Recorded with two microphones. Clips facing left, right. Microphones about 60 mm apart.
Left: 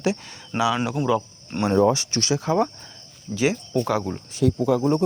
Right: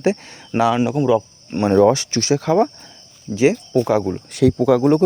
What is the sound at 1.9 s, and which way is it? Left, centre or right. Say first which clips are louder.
Speech: right 5 dB; right.